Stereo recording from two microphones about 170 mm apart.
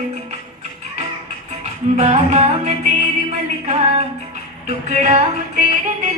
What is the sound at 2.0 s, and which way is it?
Music, 40° right (ahead or behind).